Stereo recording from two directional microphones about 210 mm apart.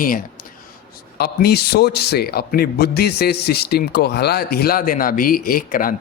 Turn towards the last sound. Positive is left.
turn(degrees=45)  # may be behind; listen again after turning